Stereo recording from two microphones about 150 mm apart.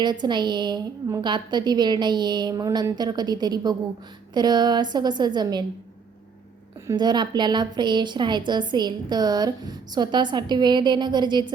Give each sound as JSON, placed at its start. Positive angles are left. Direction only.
{"t": 0.0, "sound": "a woman's voice", "side_deg": -30}
{"t": 6.9, "sound": "a woman's voice", "side_deg": -30}